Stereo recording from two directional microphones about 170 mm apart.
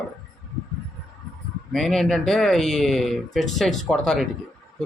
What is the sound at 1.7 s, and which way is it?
Speech, centre (ahead or behind).